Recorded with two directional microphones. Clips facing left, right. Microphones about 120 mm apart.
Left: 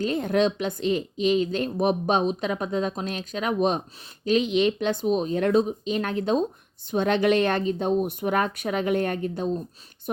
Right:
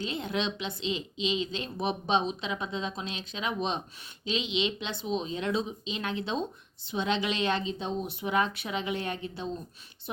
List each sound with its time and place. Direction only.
0.0 s a woman's voice: 45° left (ahead or behind)